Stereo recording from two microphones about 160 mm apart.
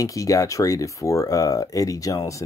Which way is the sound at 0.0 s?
20° left (ahead or behind).